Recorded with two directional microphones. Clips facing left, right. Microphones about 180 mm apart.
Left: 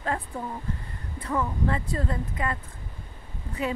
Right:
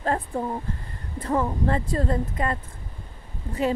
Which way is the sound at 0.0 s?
40° right (ahead or behind).